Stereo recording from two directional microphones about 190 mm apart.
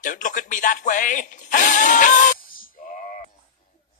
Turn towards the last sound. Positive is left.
turn(degrees=45)  # may be behind; listen again after turning